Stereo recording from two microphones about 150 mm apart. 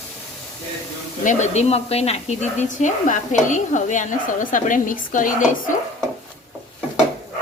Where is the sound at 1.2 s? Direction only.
55° left (ahead or behind).